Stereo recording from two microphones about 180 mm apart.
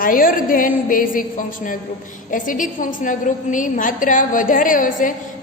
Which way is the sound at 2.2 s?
45° left (ahead or behind).